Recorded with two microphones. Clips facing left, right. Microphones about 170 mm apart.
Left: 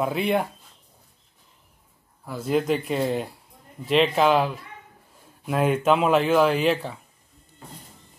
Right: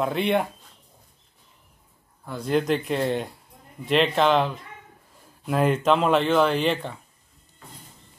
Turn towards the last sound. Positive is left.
turn(degrees=5)  # may be behind; listen again after turning